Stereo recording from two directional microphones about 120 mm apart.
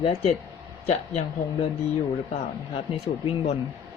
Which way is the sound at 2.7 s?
55° left (ahead or behind).